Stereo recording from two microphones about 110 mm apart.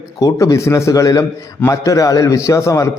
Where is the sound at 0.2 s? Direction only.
30° left (ahead or behind).